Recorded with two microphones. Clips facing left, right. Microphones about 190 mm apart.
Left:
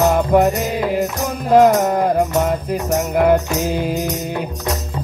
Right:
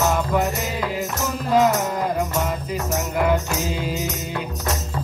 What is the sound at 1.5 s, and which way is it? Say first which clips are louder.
Music: left 7 dB; 55° left (ahead or behind).